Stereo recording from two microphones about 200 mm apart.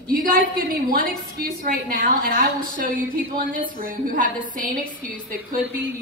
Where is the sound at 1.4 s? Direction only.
45° right (ahead or behind).